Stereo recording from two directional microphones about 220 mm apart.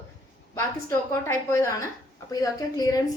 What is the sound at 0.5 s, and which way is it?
A woman's voice, 15° left (ahead or behind).